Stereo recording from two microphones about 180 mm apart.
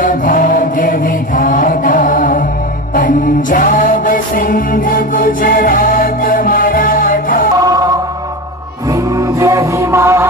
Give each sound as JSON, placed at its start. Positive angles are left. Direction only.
{"t": 0.0, "sound": "chant", "side_deg": 50}
{"t": 2.9, "sound": "music", "side_deg": 50}
{"t": 7.5, "sound": "music", "side_deg": -20}